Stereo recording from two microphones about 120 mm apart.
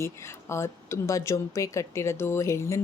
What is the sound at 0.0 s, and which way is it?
A woman's voice, 25° left (ahead or behind).